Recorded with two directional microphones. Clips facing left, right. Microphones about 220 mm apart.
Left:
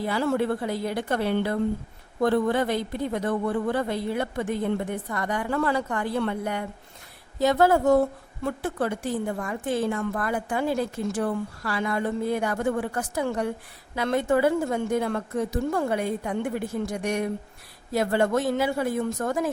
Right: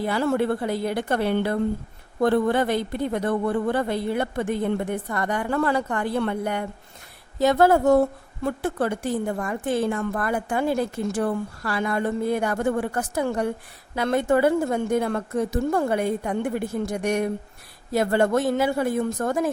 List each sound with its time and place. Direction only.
0.0 s speech: 55° right (ahead or behind)
8.4 s a woman's voice: 50° right (ahead or behind)